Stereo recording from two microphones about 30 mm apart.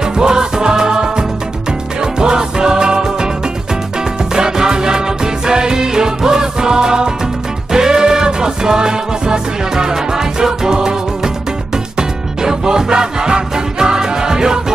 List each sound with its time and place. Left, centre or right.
0.2 s music: right
4.4 s music: right
12.0 s music: right